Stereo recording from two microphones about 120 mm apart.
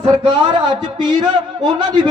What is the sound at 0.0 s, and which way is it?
A man's voice, 40° right (ahead or behind).